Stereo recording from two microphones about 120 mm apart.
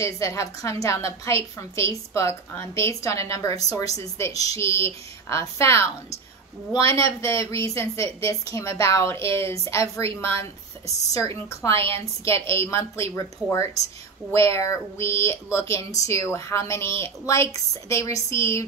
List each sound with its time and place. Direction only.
0.0 s a woman's voice: 25° left (ahead or behind)